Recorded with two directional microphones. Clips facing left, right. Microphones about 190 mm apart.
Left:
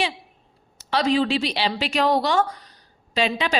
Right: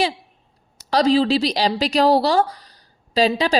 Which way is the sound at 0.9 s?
35° right (ahead or behind).